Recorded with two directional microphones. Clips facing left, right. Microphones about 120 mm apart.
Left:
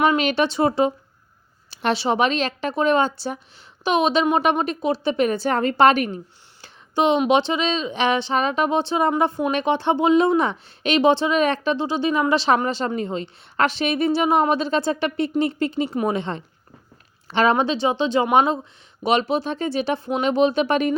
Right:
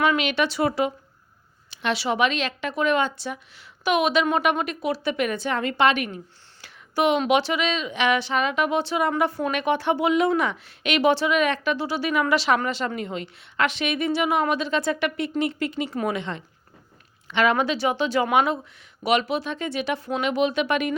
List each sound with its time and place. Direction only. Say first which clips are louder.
0.2 s a woman's voice: left 3 dB; 35° left (ahead or behind)
6.6 s a woman's voice: left 2 dB; 25° left (ahead or behind)